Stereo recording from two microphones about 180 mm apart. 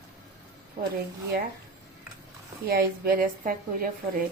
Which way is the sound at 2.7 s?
55° right (ahead or behind).